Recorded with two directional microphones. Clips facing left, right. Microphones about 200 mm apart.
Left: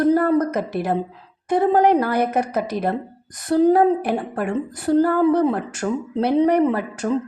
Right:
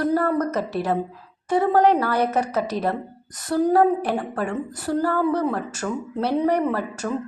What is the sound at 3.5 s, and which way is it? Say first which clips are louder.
Speech: left 3 dB; 25° left (ahead or behind).